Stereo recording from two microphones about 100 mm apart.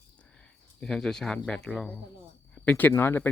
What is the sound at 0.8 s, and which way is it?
Speech, 5° left (ahead or behind).